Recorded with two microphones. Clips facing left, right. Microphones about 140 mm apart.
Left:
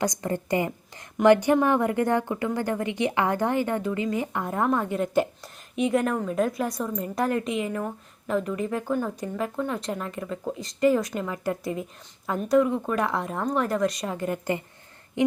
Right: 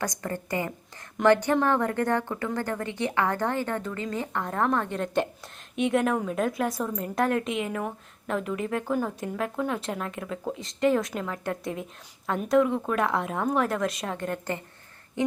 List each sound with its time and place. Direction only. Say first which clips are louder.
0.0 s a woman's voice: left 4 dB; 20° left (ahead or behind)